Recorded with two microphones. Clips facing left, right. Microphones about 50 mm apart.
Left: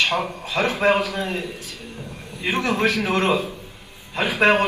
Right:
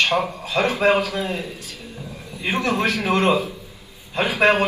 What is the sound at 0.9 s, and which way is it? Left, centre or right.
A man's voice, left.